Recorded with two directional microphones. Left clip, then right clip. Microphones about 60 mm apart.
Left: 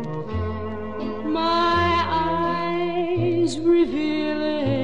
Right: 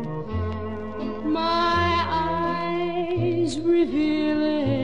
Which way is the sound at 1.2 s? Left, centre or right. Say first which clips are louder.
Left 2 dB; left.